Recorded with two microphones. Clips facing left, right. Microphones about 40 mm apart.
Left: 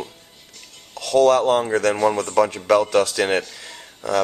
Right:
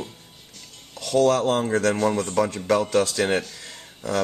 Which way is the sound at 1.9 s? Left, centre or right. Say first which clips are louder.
Left 4 dB; left.